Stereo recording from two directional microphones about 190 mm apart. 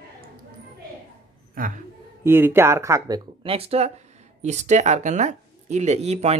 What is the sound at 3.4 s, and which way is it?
Speech, 30° right (ahead or behind).